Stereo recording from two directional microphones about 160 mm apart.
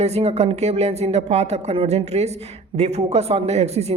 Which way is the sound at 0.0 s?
40° right (ahead or behind).